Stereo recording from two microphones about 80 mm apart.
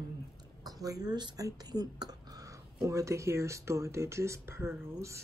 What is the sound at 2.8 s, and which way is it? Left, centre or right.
Speech, right.